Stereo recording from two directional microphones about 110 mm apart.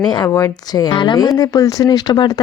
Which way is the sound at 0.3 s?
25° left (ahead or behind).